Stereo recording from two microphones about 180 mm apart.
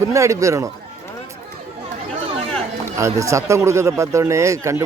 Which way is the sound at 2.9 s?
15° right (ahead or behind).